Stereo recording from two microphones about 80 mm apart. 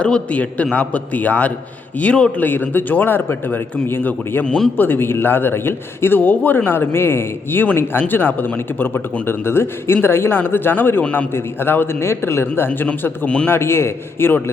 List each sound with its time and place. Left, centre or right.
0.0 s a man's voice: centre
2.4 s a man's voice: left
4.4 s speech: centre
4.8 s a man's voice: left
13.5 s a man's voice: left